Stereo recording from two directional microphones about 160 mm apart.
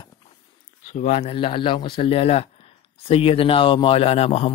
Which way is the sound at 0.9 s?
45° left (ahead or behind).